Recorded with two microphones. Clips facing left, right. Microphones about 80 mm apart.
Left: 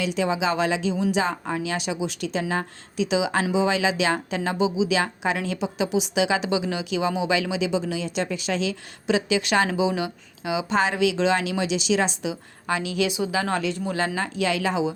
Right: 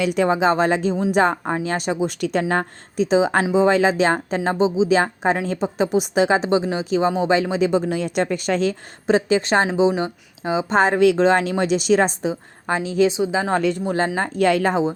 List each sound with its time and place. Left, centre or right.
0.0 s speech: right
13.6 s speech: right
13.8 s speech: right
14.2 s speech: right